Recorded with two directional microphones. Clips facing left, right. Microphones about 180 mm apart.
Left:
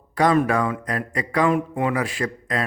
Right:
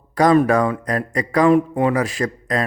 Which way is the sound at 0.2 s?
40° right (ahead or behind).